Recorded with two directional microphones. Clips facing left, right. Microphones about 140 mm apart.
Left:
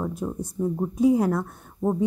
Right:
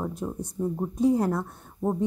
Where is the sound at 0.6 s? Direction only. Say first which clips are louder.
Left 2 dB; 15° right (ahead or behind).